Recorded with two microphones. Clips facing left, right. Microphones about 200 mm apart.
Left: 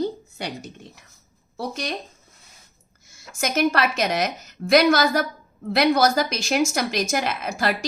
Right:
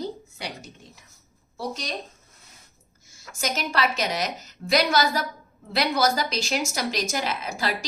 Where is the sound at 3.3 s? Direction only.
55° left (ahead or behind).